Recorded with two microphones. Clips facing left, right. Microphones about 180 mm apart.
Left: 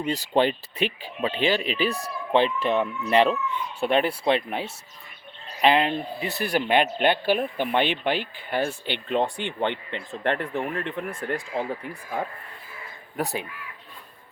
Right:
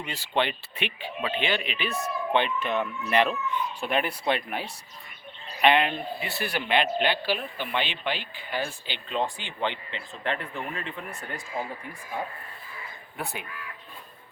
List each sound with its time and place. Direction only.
0.0 s a man's voice: 40° left (ahead or behind); by 11.9 s 65° left (ahead or behind)
13.1 s speech: 40° left (ahead or behind)